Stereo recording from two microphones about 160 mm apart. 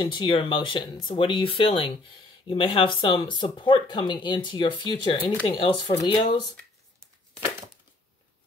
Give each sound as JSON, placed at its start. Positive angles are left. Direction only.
{"t": 0.0, "sound": "speech", "side_deg": 30}